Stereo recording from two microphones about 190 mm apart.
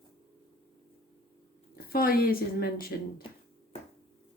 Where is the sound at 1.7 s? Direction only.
50° left (ahead or behind).